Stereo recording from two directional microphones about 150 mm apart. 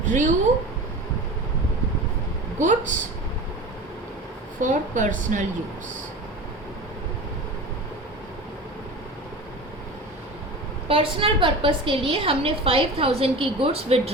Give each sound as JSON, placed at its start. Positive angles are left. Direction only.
{"t": 0.0, "sound": "a woman's voice", "side_deg": -60}
{"t": 2.6, "sound": "speech", "side_deg": -55}
{"t": 4.6, "sound": "speech", "side_deg": -60}
{"t": 10.8, "sound": "a woman's voice", "side_deg": -35}